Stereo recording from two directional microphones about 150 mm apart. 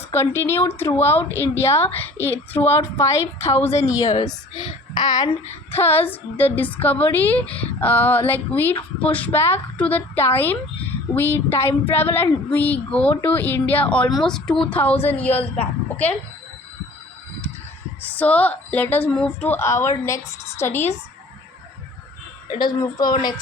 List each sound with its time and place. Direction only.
0.1 s a woman's voice: 15° left (ahead or behind)
5.7 s a woman's voice: 15° left (ahead or behind)
18.0 s a woman's voice: 10° left (ahead or behind)
22.5 s a woman's voice: 25° left (ahead or behind)